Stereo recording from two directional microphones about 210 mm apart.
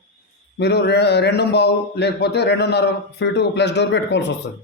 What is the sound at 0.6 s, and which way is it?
A man's voice, 50° left (ahead or behind).